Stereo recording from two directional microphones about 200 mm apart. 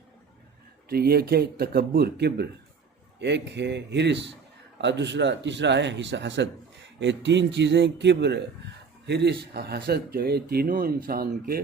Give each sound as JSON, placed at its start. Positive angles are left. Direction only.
{"t": 0.9, "sound": "speech", "side_deg": -50}